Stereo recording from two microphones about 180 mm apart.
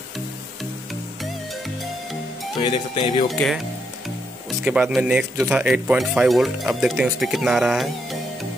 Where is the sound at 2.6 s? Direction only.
25° left (ahead or behind).